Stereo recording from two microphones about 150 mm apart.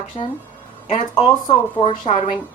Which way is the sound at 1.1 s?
30° left (ahead or behind).